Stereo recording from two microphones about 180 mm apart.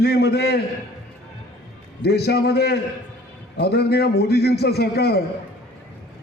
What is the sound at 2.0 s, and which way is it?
A man's voice, 65° left (ahead or behind).